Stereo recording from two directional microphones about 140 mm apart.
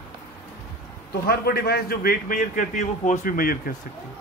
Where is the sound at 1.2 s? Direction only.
90° left.